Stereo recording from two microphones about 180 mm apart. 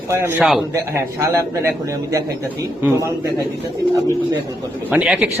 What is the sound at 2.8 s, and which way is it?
Speech, 15° right (ahead or behind).